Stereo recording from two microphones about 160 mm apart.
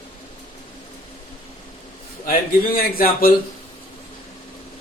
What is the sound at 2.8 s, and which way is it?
Speech, 65° left (ahead or behind).